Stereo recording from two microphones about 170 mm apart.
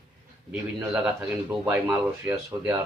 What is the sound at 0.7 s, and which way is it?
Speech, 15° right (ahead or behind).